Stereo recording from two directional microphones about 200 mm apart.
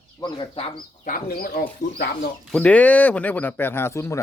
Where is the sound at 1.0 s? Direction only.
45° left (ahead or behind).